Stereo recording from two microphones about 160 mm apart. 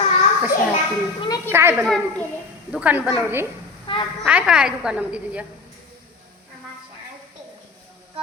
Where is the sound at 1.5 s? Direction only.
15° right (ahead or behind).